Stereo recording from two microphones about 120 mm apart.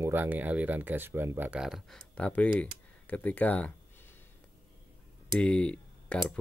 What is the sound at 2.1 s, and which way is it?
Speech, 10° left (ahead or behind).